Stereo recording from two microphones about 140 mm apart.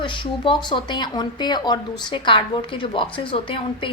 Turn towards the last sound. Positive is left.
turn(degrees=40)  # may be behind; listen again after turning